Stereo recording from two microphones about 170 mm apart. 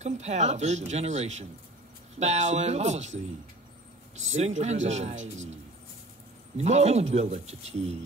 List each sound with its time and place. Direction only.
0.0 s speech: 40° right (ahead or behind)
4.2 s a man's voice: 40° right (ahead or behind)